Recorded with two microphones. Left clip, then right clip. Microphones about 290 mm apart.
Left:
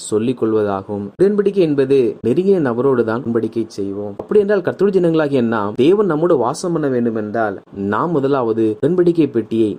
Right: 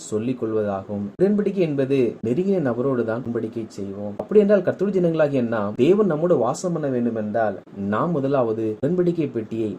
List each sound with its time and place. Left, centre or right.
0.1 s speech: left
4.3 s speech: left